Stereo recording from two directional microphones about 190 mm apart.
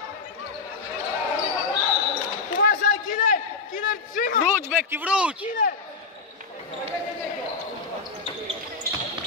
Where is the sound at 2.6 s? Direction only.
45° left (ahead or behind).